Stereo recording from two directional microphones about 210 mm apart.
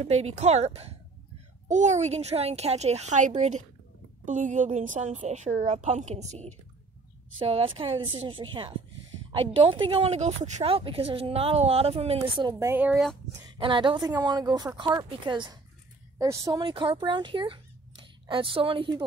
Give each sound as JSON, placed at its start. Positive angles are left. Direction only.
{"t": 0.0, "sound": "a woman's voice", "side_deg": -30}
{"t": 13.6, "sound": "speech", "side_deg": -20}